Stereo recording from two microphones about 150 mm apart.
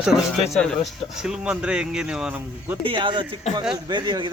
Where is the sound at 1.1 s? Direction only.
5° right (ahead or behind).